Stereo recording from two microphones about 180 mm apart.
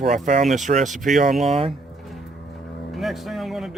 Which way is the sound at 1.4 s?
35° right (ahead or behind).